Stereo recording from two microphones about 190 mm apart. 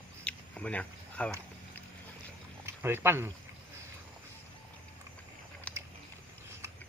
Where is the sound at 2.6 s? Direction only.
10° right (ahead or behind).